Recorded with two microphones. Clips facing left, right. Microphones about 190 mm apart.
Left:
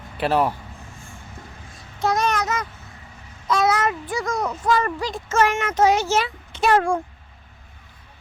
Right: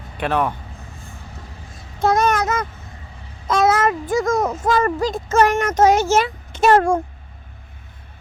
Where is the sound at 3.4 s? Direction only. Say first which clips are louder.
Right 4 dB; 50° right (ahead or behind).